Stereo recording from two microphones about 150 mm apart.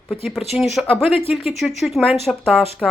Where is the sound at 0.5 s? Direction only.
Centre (ahead or behind).